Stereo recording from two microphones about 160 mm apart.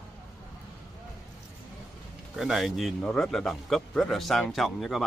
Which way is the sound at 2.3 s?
Centre (ahead or behind).